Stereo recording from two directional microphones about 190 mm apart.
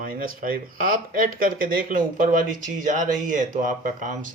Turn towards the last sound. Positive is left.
turn(degrees=-40)  # may be behind; listen again after turning